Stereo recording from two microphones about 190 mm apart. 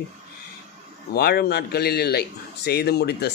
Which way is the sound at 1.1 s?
60° left (ahead or behind).